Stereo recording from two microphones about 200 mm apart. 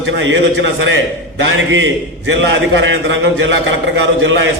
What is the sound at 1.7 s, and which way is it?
A man's voice, 70° right (ahead or behind).